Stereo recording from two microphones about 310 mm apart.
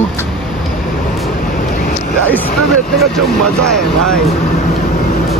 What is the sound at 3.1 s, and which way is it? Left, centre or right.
Speech, centre.